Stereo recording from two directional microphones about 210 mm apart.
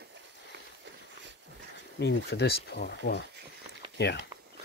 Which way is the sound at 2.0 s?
55° left (ahead or behind).